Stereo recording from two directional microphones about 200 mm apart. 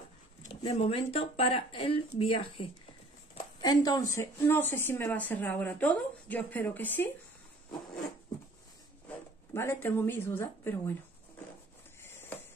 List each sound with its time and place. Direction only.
0.5 s speech: 30° left (ahead or behind); by 7.1 s 10° left (ahead or behind)
9.5 s speech: 10° left (ahead or behind)
12.0 s a sound: 10° left (ahead or behind)